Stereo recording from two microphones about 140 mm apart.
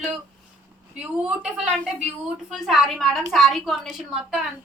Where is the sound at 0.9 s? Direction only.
5° right (ahead or behind).